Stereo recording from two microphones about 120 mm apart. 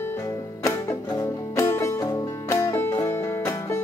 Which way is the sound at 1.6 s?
25° left (ahead or behind).